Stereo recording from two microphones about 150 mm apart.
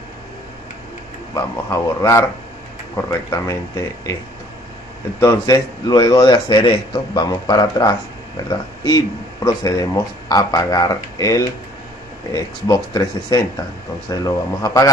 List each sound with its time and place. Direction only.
1.3 s speech: 20° left (ahead or behind)
5.2 s speech: 25° left (ahead or behind)